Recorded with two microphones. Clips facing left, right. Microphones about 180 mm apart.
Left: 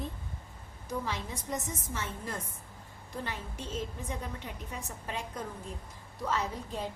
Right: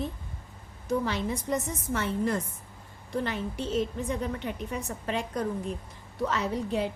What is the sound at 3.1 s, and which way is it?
A woman's voice, 80° right.